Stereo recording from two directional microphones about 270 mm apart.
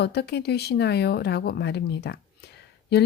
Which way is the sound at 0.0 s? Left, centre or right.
Left.